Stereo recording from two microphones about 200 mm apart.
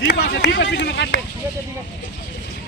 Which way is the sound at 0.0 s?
55° left (ahead or behind).